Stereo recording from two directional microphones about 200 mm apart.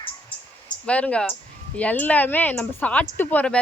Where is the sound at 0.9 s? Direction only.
5° left (ahead or behind).